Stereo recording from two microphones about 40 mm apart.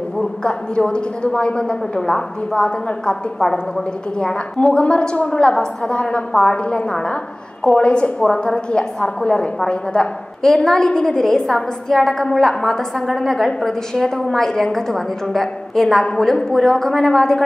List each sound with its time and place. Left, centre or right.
0.4 s a woman's voice: left
4.6 s a woman's voice: left
10.4 s a woman's voice: centre